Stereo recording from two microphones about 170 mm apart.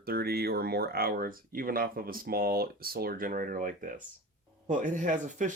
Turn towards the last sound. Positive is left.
turn(degrees=-50)  # may be behind; listen again after turning